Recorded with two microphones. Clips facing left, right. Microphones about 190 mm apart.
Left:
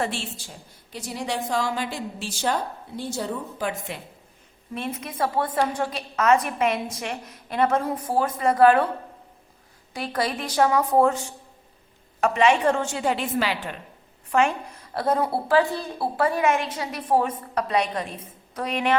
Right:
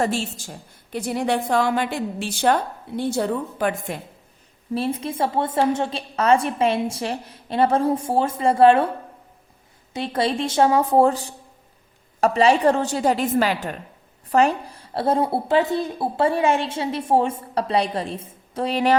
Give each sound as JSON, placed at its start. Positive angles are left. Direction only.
{"t": 0.0, "sound": "a woman's voice", "side_deg": -40}
{"t": 4.7, "sound": "a woman's voice", "side_deg": -30}
{"t": 9.9, "sound": "a woman's voice", "side_deg": -25}